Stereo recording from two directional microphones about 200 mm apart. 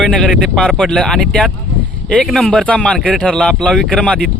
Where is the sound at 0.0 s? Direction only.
Centre (ahead or behind).